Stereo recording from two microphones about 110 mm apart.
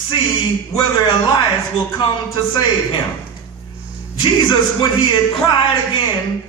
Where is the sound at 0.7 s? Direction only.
40° left (ahead or behind).